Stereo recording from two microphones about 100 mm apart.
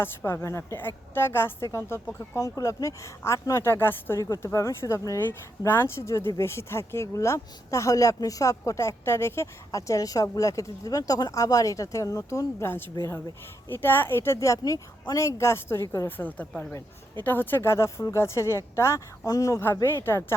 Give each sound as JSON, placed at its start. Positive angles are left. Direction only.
{"t": 0.0, "sound": "speech", "side_deg": 25}
{"t": 19.6, "sound": "speech", "side_deg": 25}